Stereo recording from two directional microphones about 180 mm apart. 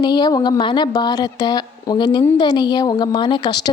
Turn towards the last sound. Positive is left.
turn(degrees=25)  # may be behind; listen again after turning